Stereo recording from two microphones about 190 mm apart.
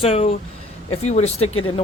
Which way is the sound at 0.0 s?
35° left (ahead or behind).